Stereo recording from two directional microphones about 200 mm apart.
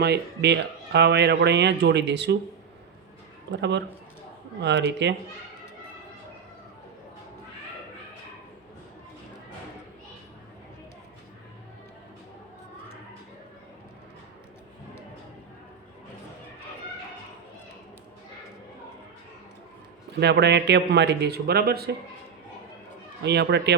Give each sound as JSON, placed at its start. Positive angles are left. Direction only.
{"t": 0.0, "sound": "speech", "side_deg": -55}
{"t": 3.5, "sound": "speech", "side_deg": -60}
{"t": 20.1, "sound": "speech", "side_deg": -55}
{"t": 23.2, "sound": "speech", "side_deg": -55}